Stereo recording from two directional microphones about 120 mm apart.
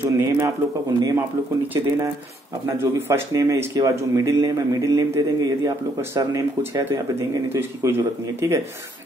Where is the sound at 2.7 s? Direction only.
20° right (ahead or behind).